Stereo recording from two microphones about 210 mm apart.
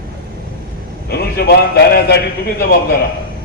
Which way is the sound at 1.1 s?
50° left (ahead or behind).